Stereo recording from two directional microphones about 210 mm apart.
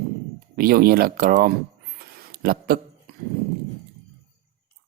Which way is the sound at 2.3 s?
45° right (ahead or behind).